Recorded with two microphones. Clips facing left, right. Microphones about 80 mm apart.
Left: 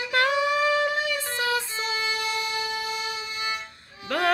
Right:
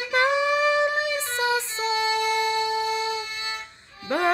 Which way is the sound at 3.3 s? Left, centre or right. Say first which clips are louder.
Left 2 dB; centre.